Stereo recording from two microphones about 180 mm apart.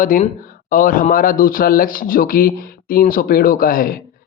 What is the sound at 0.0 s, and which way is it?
Speech, 50° left (ahead or behind).